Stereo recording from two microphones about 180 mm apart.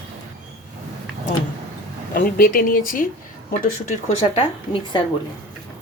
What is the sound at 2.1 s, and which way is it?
Speech, 50° left (ahead or behind).